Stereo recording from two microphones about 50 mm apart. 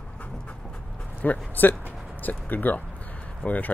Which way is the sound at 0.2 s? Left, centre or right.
Left.